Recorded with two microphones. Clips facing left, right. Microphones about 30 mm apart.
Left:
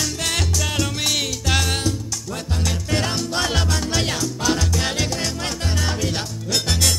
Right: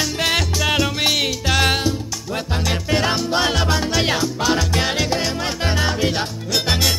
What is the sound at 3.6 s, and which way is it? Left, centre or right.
Music, right.